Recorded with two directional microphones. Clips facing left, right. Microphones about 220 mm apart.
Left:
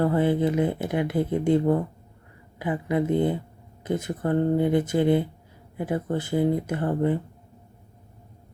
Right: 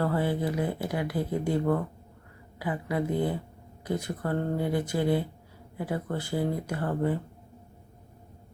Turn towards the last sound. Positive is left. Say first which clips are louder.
# left 4 dB
turn(degrees=20)  # may be behind; listen again after turning